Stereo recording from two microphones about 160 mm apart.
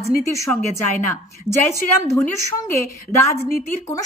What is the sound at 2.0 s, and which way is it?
Speech, 20° left (ahead or behind).